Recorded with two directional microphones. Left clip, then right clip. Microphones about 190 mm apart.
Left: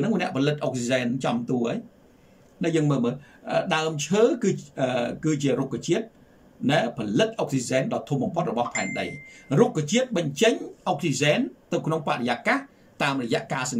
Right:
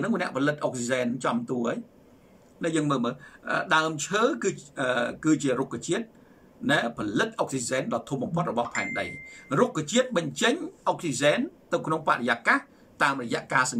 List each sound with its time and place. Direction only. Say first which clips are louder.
0.2 s speech: left 1 dB; 15° left (ahead or behind)
2.6 s speech: left 2 dB; 10° left (ahead or behind)